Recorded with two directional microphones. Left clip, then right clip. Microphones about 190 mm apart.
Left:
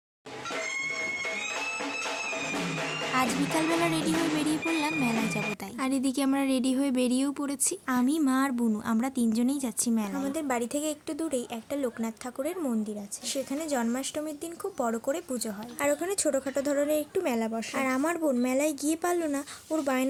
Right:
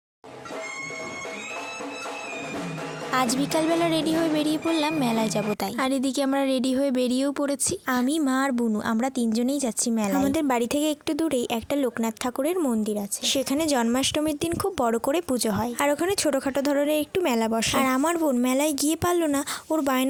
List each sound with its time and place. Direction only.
3.8 s a woman's voice: 40° right (ahead or behind)